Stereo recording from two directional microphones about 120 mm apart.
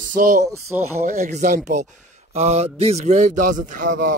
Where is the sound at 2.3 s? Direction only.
65° right (ahead or behind); by 3.9 s 90° right.